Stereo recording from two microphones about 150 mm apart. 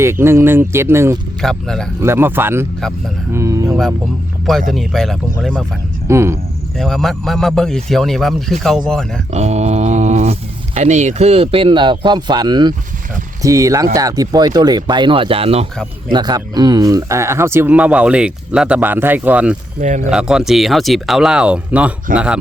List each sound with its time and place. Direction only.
0.0 s speech: 15° right (ahead or behind)
1.4 s speech: 5° left (ahead or behind)
2.0 s speech: 15° right (ahead or behind)
4.7 s speech: centre (ahead or behind)
6.1 s speech: 20° right (ahead or behind)
6.7 s speech: centre (ahead or behind)
9.3 s a sound: 45° right (ahead or behind)
10.8 s speech: 50° right (ahead or behind)
16.1 s speech: 30° right (ahead or behind); by 22.4 s 5° right (ahead or behind)